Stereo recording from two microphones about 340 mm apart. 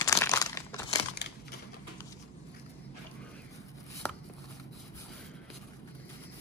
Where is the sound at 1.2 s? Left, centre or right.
Left.